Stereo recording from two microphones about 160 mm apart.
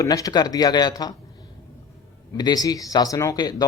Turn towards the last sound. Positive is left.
turn(degrees=25)  # may be behind; listen again after turning